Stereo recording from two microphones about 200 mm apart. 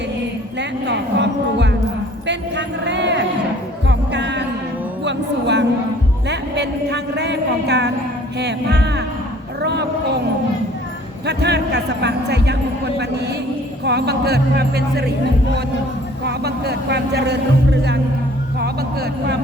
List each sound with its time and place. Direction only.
0.9 s speech: 60° right (ahead or behind)
3.8 s music: 60° right (ahead or behind)
5.0 s speech: 60° right (ahead or behind)
11.3 s speech: 55° right (ahead or behind)
16.2 s speech: 55° right (ahead or behind)